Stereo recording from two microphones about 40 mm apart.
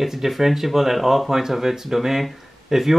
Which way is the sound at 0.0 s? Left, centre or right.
Centre.